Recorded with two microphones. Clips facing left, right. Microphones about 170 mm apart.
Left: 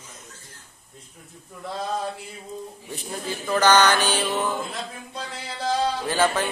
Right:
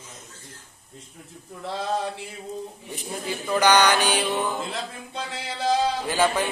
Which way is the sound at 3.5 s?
15° right (ahead or behind).